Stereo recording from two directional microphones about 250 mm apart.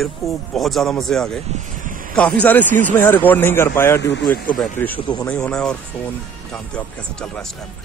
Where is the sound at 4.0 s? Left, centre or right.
Left.